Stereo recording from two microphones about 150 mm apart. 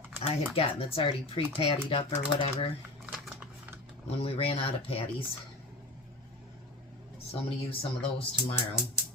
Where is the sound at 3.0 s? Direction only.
5° right (ahead or behind).